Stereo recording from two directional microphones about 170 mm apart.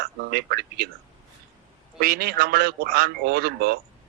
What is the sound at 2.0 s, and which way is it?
A man's voice, 65° right (ahead or behind).